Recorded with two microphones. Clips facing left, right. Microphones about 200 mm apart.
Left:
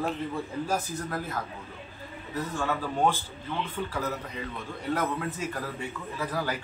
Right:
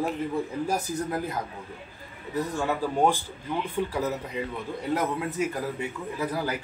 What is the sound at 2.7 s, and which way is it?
Speech, 15° right (ahead or behind).